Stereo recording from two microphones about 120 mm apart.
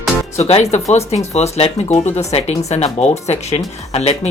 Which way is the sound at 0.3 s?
60° left (ahead or behind).